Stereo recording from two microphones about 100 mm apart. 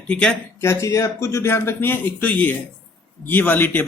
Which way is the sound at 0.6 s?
30° left (ahead or behind).